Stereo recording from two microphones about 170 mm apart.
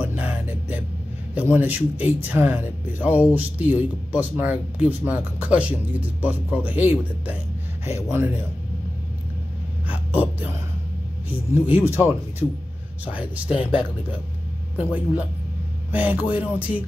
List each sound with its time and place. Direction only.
0.0 s music: 10° right (ahead or behind)
1.3 s speech: 10° right (ahead or behind)
9.8 s a sound: 10° right (ahead or behind)
11.6 s speech: 10° right (ahead or behind)
13.5 s speech: 30° left (ahead or behind)
14.8 s speech: 10° right (ahead or behind)